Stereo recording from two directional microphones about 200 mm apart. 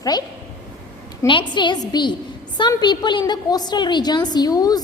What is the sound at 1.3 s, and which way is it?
A woman's voice, 25° left (ahead or behind).